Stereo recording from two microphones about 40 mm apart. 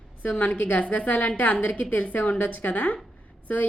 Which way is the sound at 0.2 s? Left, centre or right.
Left.